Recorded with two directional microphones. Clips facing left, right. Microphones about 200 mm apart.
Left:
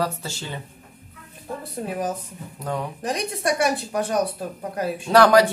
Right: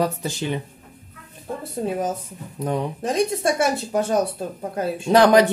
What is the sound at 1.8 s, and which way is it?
Speech, 25° right (ahead or behind).